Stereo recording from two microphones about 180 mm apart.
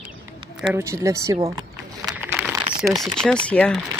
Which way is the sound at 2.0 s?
10° right (ahead or behind).